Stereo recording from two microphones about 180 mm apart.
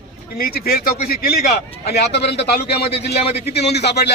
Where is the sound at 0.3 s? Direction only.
55° left (ahead or behind).